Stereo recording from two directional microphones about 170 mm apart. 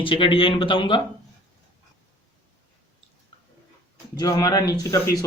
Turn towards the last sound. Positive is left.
turn(degrees=20)  # may be behind; listen again after turning